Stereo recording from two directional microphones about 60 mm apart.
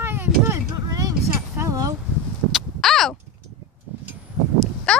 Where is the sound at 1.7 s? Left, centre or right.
Right.